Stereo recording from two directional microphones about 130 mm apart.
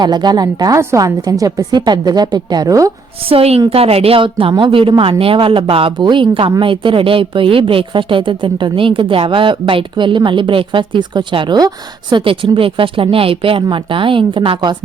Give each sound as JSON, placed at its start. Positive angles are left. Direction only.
{"t": 0.0, "sound": "a woman's voice", "side_deg": -35}
{"t": 3.2, "sound": "a woman's voice", "side_deg": -50}